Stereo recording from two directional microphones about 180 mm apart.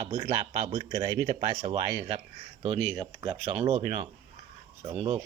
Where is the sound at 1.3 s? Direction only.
30° right (ahead or behind).